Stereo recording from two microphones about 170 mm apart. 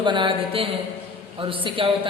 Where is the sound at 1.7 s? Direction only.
30° right (ahead or behind).